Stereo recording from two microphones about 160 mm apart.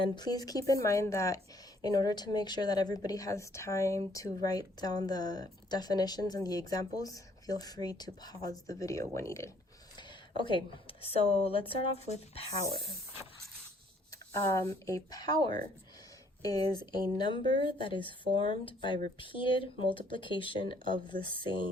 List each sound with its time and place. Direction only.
0.0 s speech: 25° left (ahead or behind)
10.0 s a woman's voice: 30° left (ahead or behind)
14.3 s speech: 20° left (ahead or behind)
20.9 s speech: 60° right (ahead or behind)